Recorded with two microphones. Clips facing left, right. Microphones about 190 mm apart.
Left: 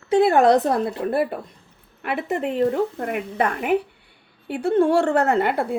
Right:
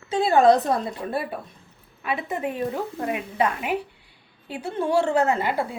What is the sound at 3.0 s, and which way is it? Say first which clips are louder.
Speech: left 1 dB; 60° left (ahead or behind).